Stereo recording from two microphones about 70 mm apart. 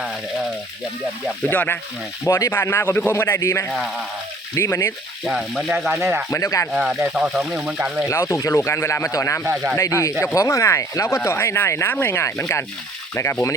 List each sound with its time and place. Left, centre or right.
1.5 s speech: left
2.2 s speech: left
5.2 s speech: centre
5.9 s speech: right
6.3 s speech: left
6.7 s speech: centre
7.9 s speech: centre
8.1 s speech: left
9.4 s speech: right
10.0 s speech: left
13.2 s speech: left